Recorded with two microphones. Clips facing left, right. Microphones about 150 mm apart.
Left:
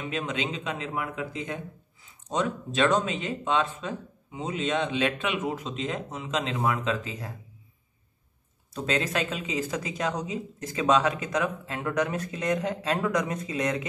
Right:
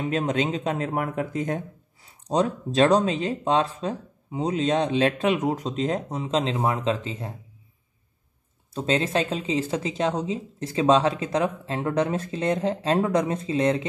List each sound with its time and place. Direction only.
0.0 s speech: 40° right (ahead or behind)
2.0 s speech: 35° right (ahead or behind)
8.7 s speech: 25° right (ahead or behind)